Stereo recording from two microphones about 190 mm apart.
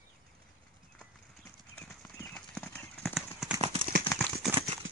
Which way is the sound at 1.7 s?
10° left (ahead or behind).